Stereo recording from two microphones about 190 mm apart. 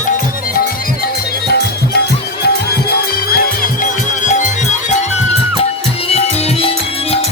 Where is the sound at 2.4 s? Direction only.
55° left (ahead or behind).